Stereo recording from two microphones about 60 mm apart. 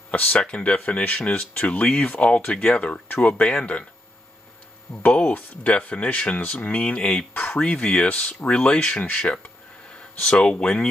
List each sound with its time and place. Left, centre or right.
0.1 s speech: left
5.0 s speech: left
7.3 s speech: left
7.6 s speech: centre
10.2 s speech: centre